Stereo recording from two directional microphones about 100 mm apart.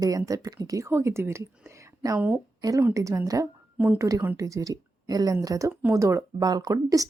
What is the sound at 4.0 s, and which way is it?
Speech, 35° right (ahead or behind).